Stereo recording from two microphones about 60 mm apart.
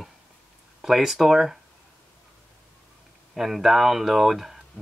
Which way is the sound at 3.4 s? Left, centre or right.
Centre.